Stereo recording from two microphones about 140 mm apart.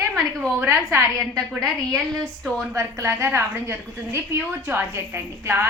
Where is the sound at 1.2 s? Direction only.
Centre (ahead or behind).